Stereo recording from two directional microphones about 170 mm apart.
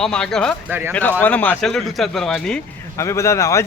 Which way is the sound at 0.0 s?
5° left (ahead or behind).